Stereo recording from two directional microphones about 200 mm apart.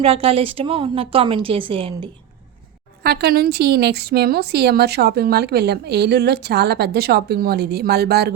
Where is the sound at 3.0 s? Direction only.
50° right (ahead or behind).